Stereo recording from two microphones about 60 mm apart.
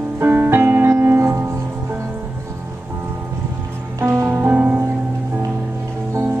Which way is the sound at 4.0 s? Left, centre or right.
Right.